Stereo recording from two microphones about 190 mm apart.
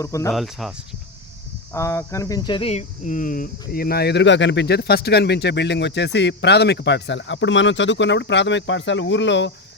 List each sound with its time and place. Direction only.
0.0 s speech: 15° left (ahead or behind)
0.3 s speech: centre (ahead or behind)
1.7 s speech: 15° left (ahead or behind); by 9.5 s 70° left (ahead or behind)